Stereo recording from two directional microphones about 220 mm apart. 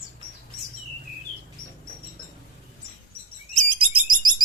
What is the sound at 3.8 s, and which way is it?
Bird, 20° right (ahead or behind).